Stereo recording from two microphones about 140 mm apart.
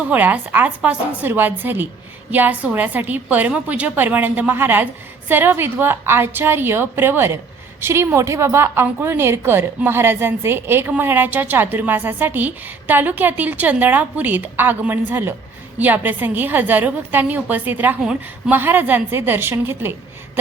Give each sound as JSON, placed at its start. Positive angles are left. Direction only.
{"t": 0.0, "sound": "a woman's voice", "side_deg": -10}